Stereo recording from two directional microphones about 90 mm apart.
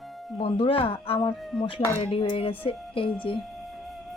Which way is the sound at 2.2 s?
75° left (ahead or behind).